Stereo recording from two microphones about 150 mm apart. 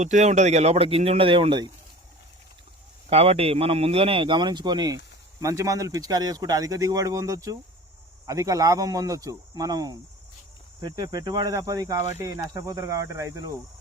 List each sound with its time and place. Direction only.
0.0 s speech: 50° right (ahead or behind); by 1.7 s 30° right (ahead or behind)
3.1 s a man's voice: 40° right (ahead or behind); by 13.5 s 20° right (ahead or behind)